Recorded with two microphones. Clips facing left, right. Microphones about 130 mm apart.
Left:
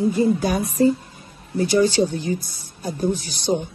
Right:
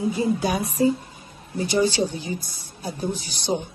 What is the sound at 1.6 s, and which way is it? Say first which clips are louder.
A woman's voice: left 4 dB; 45° left (ahead or behind).